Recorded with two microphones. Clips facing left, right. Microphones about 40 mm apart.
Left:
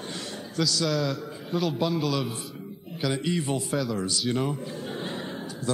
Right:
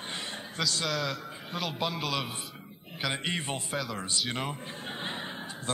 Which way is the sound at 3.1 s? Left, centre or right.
Right.